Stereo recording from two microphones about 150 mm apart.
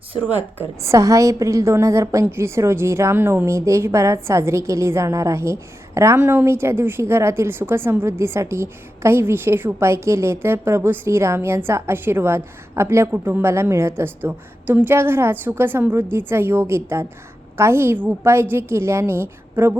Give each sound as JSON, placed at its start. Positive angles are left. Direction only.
{"t": 0.3, "sound": "a woman's voice", "side_deg": -15}